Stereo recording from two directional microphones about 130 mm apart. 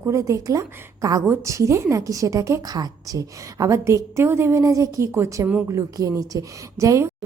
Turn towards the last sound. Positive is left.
turn(degrees=-25)  # may be behind; listen again after turning